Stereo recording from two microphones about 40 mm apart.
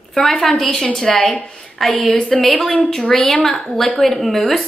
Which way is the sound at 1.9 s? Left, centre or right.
Left.